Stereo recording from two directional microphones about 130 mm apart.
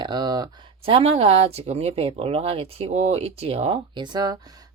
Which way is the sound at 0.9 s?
50° right (ahead or behind).